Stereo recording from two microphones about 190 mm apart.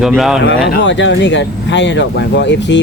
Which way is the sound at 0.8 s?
70° left (ahead or behind).